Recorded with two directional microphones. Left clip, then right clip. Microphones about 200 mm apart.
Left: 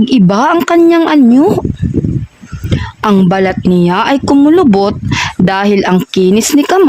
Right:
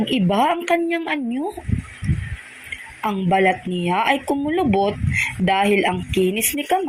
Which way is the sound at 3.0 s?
45° left (ahead or behind).